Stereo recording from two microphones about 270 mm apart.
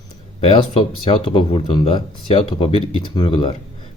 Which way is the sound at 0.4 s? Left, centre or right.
Centre.